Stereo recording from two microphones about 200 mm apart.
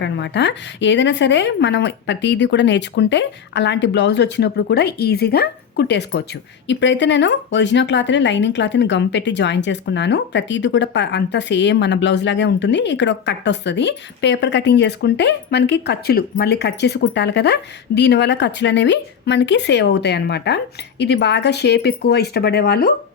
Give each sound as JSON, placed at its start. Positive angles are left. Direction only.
{"t": 0.0, "sound": "speech", "side_deg": 60}